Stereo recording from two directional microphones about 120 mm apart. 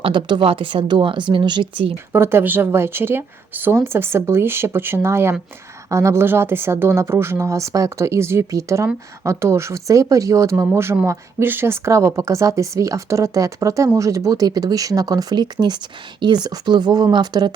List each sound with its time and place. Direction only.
0.0 s a woman's voice: 40° right (ahead or behind)
2.1 s speech: 20° right (ahead or behind); by 17.5 s 40° right (ahead or behind)